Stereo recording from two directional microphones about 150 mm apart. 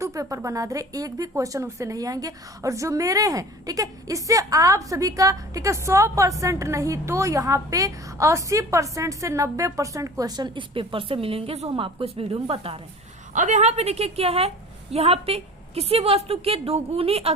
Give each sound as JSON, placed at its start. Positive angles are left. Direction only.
{"t": 0.0, "sound": "speech", "side_deg": -20}
{"t": 13.3, "sound": "a woman's voice", "side_deg": -55}